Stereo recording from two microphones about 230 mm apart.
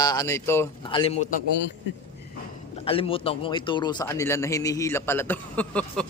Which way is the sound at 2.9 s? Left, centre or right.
Left.